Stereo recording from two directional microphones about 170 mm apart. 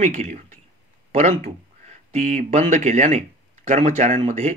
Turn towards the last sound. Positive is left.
turn(degrees=-45)  # may be behind; listen again after turning